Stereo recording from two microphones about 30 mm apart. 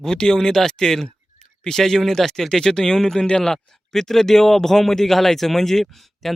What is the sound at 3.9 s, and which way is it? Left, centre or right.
Speech, centre.